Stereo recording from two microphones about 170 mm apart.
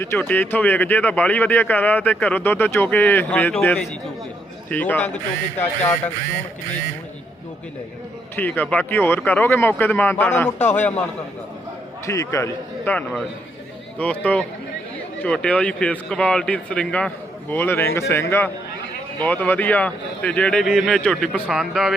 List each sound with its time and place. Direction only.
0.0 s speech: 15° left (ahead or behind)
8.4 s speech: 10° left (ahead or behind)
12.0 s a man's voice: 20° left (ahead or behind); by 21.9 s centre (ahead or behind)